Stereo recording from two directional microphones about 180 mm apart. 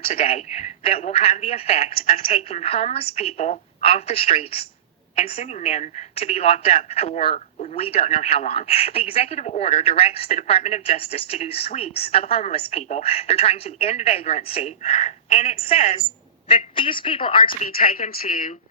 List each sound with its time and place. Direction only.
0.1 s a woman's voice: 35° left (ahead or behind)
17.6 s speech: 55° left (ahead or behind)